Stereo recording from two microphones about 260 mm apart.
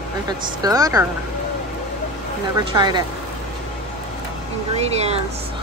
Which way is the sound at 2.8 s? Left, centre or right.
Centre.